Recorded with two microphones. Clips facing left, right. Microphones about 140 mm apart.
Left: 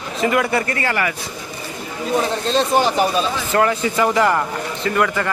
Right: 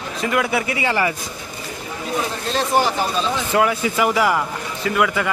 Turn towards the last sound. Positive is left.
turn(degrees=-5)  # may be behind; listen again after turning